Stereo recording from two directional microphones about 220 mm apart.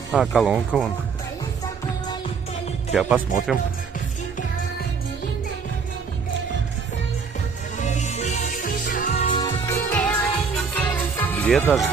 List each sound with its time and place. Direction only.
0.1 s speech: centre (ahead or behind)
2.9 s speech: 5° right (ahead or behind)
7.7 s music: 35° left (ahead or behind)
9.4 s music: 10° left (ahead or behind)